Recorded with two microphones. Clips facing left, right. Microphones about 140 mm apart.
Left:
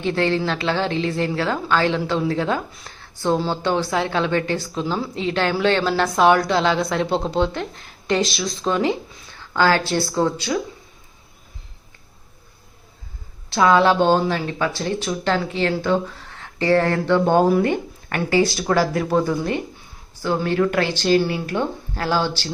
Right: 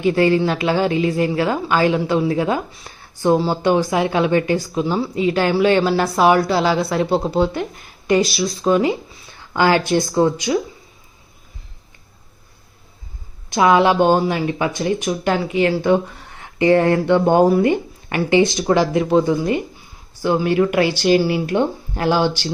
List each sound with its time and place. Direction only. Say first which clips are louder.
0.0 s speech: right 5 dB; 10° right (ahead or behind)
13.5 s speech: right 2 dB; 15° right (ahead or behind)
19.4 s speech: right 4 dB; 5° right (ahead or behind)